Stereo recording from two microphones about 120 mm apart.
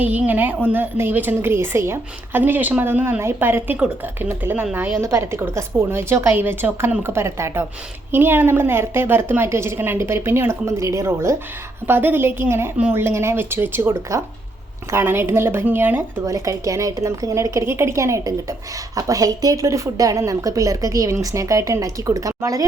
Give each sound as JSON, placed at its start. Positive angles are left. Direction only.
{"t": 0.0, "sound": "a woman's voice", "side_deg": -15}
{"t": 16.2, "sound": "a woman's voice", "side_deg": -30}